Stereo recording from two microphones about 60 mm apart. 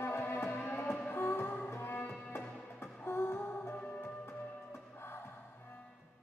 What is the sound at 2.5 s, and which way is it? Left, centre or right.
Music, left.